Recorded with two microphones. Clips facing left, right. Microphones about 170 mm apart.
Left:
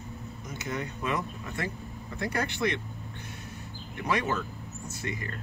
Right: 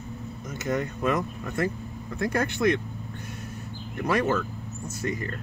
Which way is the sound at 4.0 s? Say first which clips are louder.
Right 4 dB; 40° right (ahead or behind).